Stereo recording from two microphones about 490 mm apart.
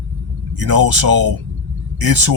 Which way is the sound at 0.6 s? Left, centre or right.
Right.